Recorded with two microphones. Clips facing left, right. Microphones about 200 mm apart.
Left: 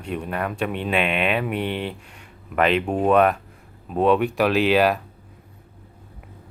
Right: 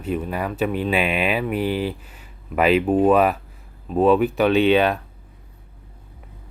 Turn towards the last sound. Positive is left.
turn(degrees=0)  # may be behind; listen again after turning